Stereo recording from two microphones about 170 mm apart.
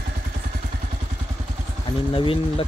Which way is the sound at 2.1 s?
30° left (ahead or behind).